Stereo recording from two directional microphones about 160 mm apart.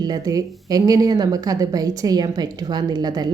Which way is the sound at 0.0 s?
25° right (ahead or behind).